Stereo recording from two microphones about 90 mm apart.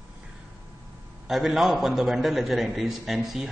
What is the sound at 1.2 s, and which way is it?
A man's voice, 5° right (ahead or behind).